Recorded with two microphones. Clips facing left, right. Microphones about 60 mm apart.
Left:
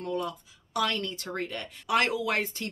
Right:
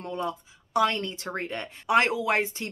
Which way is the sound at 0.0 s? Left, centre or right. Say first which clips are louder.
Right 1 dB; right.